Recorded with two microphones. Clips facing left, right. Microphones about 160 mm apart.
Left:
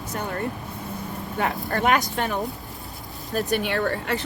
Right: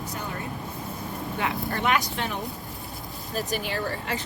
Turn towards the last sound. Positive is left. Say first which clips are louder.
# left 5 dB
turn(degrees=60)  # may be behind; listen again after turning